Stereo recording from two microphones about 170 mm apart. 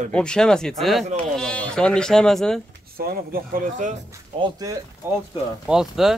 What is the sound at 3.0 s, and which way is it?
Speech, 55° right (ahead or behind).